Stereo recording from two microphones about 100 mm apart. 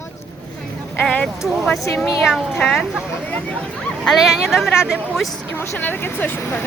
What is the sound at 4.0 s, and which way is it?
Speech, centre (ahead or behind).